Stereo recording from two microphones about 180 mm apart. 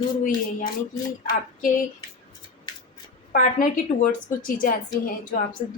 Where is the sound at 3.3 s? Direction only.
50° left (ahead or behind).